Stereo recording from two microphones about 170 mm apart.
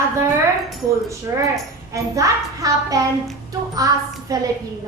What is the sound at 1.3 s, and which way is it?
A woman's voice, 20° right (ahead or behind).